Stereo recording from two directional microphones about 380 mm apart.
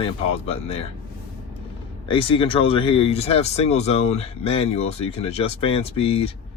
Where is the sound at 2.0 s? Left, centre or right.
Centre.